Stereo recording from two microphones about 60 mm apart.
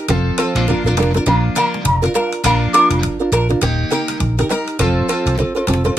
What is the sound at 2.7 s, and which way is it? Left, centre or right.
Music, right.